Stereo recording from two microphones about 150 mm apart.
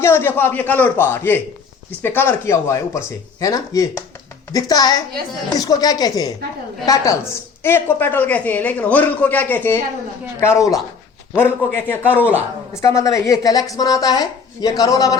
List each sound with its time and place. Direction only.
0.0 s a man's voice: 15° left (ahead or behind)